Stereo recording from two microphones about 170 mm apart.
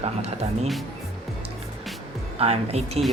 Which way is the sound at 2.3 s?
35° right (ahead or behind).